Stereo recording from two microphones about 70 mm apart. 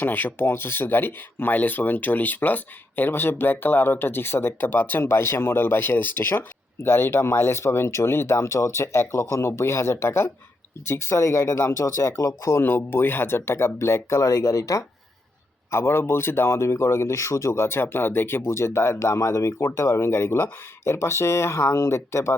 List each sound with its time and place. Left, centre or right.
0.0 s speech: left
12.6 s speech: left
15.7 s speech: left